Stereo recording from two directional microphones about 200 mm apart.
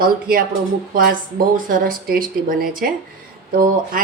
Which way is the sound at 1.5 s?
45° right (ahead or behind).